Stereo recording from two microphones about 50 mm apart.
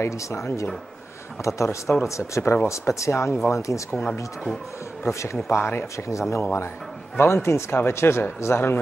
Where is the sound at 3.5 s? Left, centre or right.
Left.